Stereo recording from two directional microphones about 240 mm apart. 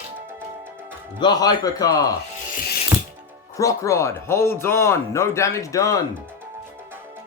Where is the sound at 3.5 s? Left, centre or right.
Centre.